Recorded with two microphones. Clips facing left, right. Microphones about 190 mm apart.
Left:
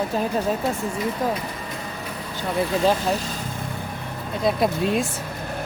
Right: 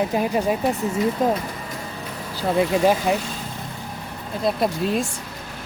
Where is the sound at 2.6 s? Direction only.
10° right (ahead or behind).